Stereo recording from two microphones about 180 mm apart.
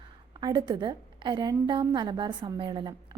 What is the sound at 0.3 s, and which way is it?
A woman's voice, 25° right (ahead or behind).